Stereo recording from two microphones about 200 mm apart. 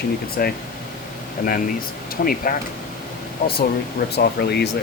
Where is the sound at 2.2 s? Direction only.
45° left (ahead or behind).